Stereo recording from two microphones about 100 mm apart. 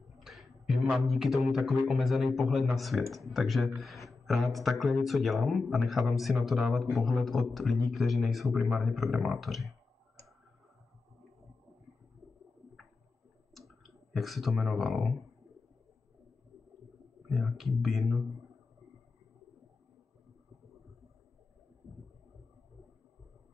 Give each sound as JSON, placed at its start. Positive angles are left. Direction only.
{"t": 0.2, "sound": "a sound", "side_deg": -5}
{"t": 0.9, "sound": "speech", "side_deg": 0}
{"t": 13.6, "sound": "speech", "side_deg": 0}
{"t": 17.3, "sound": "speech", "side_deg": 0}